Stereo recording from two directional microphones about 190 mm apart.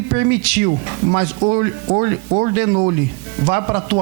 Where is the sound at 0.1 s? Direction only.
15° right (ahead or behind).